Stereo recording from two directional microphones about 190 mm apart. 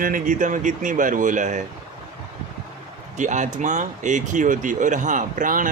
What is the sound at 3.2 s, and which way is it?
Speech, 40° right (ahead or behind).